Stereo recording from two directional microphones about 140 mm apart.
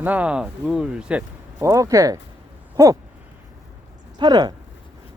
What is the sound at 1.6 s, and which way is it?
Speech, 20° right (ahead or behind).